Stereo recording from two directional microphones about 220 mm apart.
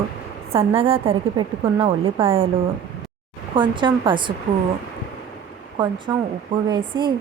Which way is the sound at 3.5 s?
20° right (ahead or behind).